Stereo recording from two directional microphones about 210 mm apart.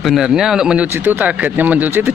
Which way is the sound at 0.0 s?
Centre (ahead or behind).